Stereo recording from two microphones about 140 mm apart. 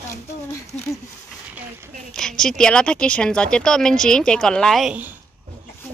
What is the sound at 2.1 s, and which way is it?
Speech, 5° left (ahead or behind).